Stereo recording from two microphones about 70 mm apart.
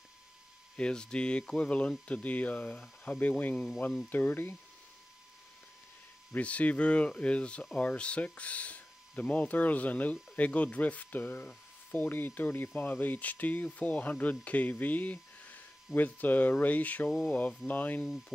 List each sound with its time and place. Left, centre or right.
0.7 s speech: centre; by 4.6 s left
6.3 s speech: centre